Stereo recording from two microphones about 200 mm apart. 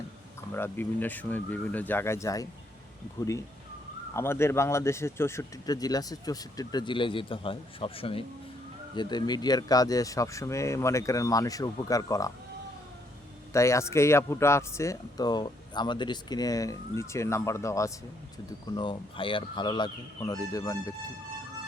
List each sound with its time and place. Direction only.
0.5 s speech: 10° left (ahead or behind)
4.1 s speech: 10° left (ahead or behind)
13.5 s speech: 15° left (ahead or behind)